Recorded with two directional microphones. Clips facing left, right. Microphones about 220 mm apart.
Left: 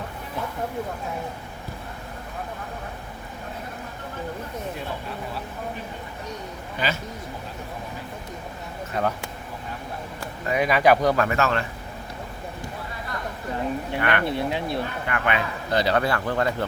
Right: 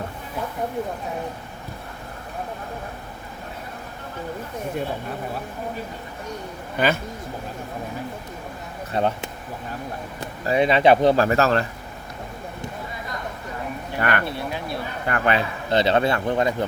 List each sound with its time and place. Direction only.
6.7 s speech: 55° right (ahead or behind)
8.9 s speech: 25° right (ahead or behind)
10.4 s speech: 30° right (ahead or behind)
14.0 s speech: 45° right (ahead or behind)
14.3 s speech: 20° left (ahead or behind)
15.0 s speech: 40° right (ahead or behind)
15.7 s speech: 25° right (ahead or behind)